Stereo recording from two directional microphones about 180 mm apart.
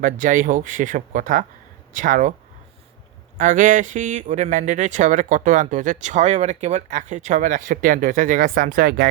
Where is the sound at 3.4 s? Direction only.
45° right (ahead or behind).